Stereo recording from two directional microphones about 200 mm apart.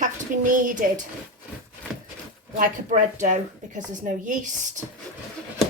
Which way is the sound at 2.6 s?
40° right (ahead or behind).